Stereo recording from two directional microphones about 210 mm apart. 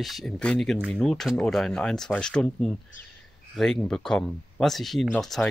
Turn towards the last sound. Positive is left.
turn(degrees=0)  # may be behind; listen again after turning